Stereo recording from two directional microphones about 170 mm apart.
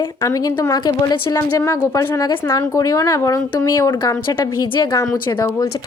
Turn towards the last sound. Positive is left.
turn(degrees=25)  # may be behind; listen again after turning